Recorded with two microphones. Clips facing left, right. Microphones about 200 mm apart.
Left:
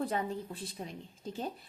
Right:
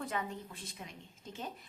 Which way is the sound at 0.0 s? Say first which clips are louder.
Left 5 dB; 35° left (ahead or behind).